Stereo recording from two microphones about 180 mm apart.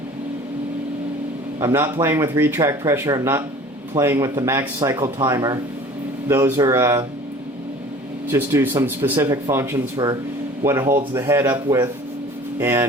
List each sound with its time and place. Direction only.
1.5 s speech: 15° right (ahead or behind)
8.3 s speech: 15° right (ahead or behind)